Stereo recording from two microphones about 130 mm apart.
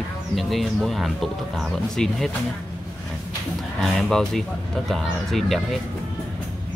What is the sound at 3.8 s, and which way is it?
Speech, 5° left (ahead or behind).